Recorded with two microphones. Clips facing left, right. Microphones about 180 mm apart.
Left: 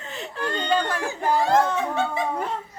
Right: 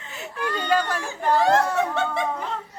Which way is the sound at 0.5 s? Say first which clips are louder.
Right 1 dB; 5° right (ahead or behind).